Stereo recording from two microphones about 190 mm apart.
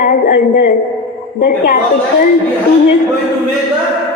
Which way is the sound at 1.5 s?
50° left (ahead or behind).